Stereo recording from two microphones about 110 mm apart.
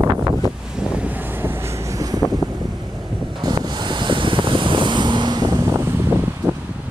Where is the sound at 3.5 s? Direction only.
45° right (ahead or behind).